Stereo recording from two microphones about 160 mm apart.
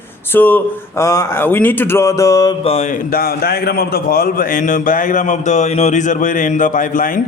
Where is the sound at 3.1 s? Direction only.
70° left (ahead or behind).